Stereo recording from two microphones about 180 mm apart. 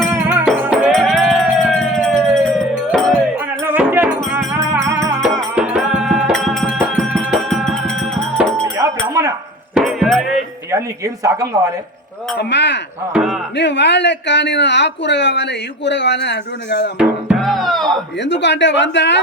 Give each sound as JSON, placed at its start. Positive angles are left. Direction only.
{"t": 0.1, "sound": "music", "side_deg": -10}
{"t": 0.9, "sound": "a sound", "side_deg": 5}
{"t": 3.6, "sound": "music", "side_deg": -10}
{"t": 5.3, "sound": "music", "side_deg": 0}
{"t": 8.6, "sound": "music", "side_deg": -20}
{"t": 9.7, "sound": "music", "side_deg": 0}
{"t": 10.7, "sound": "a woman's voice", "side_deg": -20}
{"t": 12.4, "sound": "speech", "side_deg": 75}
{"t": 13.1, "sound": "music", "side_deg": -5}
{"t": 13.6, "sound": "speech", "side_deg": 75}
{"t": 17.0, "sound": "music", "side_deg": -5}
{"t": 18.2, "sound": "speech", "side_deg": 75}